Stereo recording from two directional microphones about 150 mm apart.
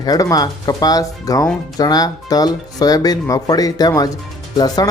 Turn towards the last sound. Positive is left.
turn(degrees=25)  # may be behind; listen again after turning